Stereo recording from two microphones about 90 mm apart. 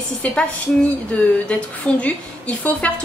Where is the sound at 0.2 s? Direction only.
10° left (ahead or behind).